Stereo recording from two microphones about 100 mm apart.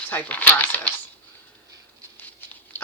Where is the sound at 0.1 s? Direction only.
15° left (ahead or behind).